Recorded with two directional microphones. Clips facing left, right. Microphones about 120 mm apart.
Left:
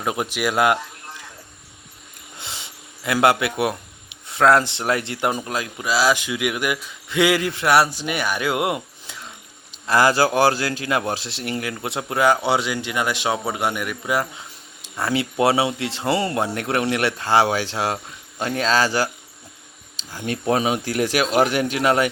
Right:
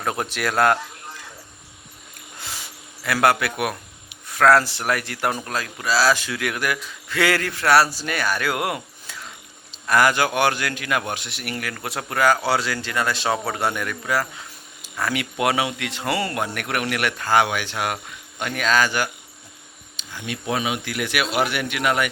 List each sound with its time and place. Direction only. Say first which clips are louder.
0.0 s speech: left 2 dB; 15° left (ahead or behind)
2.4 s a sound: even; 20° left (ahead or behind)
4.3 s speech: even; 20° left (ahead or behind)